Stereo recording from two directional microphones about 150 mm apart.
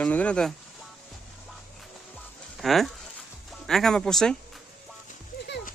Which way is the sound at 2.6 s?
Centre (ahead or behind).